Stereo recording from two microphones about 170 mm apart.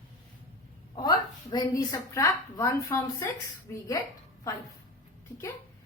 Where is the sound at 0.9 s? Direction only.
25° left (ahead or behind).